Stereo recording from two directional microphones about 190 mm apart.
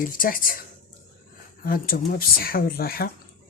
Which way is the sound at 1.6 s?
50° left (ahead or behind).